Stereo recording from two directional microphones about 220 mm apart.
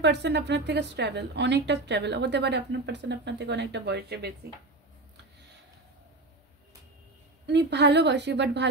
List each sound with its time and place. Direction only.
0.0 s a woman's voice: 50° right (ahead or behind)
7.4 s a woman's voice: 50° right (ahead or behind)